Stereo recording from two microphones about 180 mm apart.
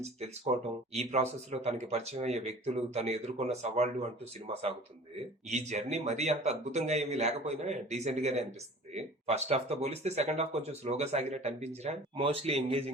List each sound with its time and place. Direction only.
0.0 s speech: 35° right (ahead or behind)